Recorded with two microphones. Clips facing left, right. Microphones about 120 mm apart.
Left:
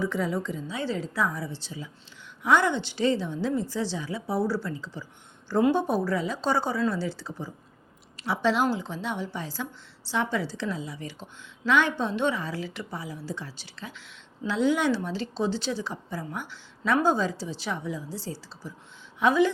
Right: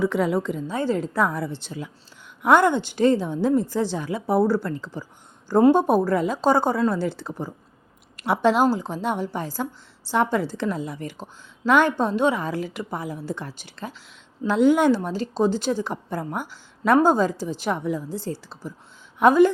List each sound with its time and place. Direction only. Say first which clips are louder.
0.0 s a woman's voice: right 6 dB; 65° right (ahead or behind)